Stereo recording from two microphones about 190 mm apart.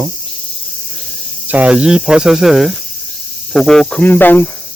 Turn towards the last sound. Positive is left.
turn(degrees=10)  # may be behind; listen again after turning